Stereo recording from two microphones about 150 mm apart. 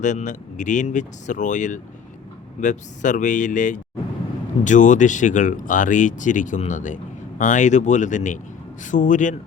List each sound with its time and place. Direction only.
0.0 s speech: 55° left (ahead or behind)